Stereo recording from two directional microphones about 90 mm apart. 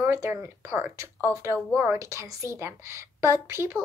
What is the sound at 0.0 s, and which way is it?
A woman's voice, 30° right (ahead or behind).